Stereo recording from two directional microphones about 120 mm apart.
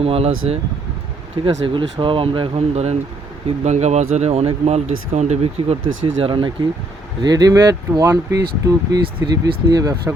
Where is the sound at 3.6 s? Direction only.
75° right (ahead or behind).